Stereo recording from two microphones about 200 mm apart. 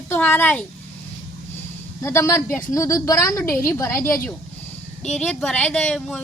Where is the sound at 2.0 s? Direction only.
15° left (ahead or behind).